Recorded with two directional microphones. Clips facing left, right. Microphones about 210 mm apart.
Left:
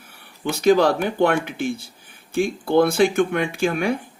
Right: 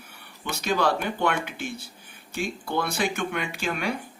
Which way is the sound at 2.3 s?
55° left (ahead or behind).